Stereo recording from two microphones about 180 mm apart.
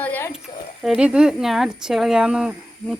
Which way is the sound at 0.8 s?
5° right (ahead or behind).